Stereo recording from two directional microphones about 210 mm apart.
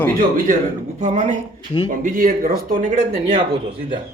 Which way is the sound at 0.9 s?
35° right (ahead or behind).